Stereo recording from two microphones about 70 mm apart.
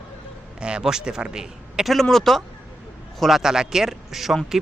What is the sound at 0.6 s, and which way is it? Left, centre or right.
A man's voice, centre.